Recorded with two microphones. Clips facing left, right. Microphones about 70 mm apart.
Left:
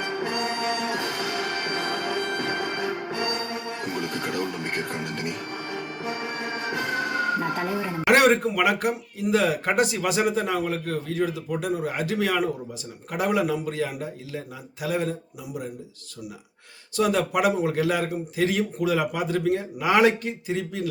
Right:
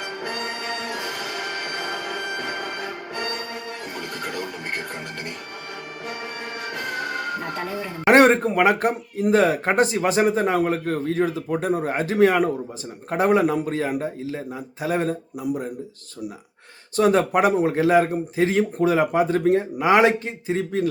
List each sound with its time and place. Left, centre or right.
0.8 s music: centre
8.0 s speech: right
17.0 s speech: right